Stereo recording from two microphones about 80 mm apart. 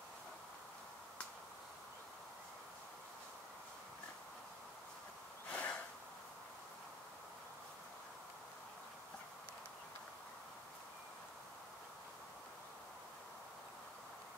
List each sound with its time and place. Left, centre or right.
5.5 s snort: centre